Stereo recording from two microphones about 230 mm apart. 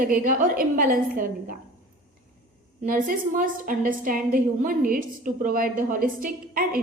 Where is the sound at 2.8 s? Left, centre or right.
Right.